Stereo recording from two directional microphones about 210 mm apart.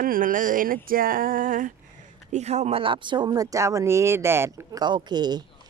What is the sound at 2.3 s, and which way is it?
Speech, 30° right (ahead or behind).